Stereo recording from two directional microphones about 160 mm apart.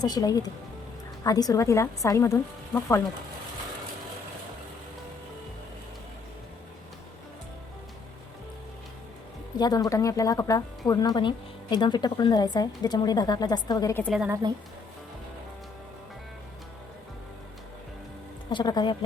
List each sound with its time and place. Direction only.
0.0 s speech: 25° left (ahead or behind)
9.6 s speech: 25° left (ahead or behind)
14.3 s speech: 20° right (ahead or behind)
18.5 s speech: 25° left (ahead or behind)